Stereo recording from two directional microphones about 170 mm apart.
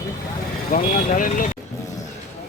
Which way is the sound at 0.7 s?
55° left (ahead or behind).